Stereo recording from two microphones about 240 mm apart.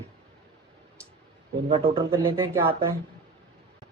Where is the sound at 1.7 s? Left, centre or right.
Right.